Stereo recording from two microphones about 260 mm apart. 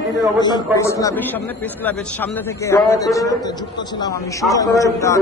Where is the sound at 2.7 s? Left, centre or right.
Centre.